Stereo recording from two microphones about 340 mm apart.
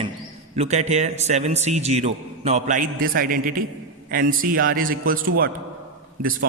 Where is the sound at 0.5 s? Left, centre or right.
Centre.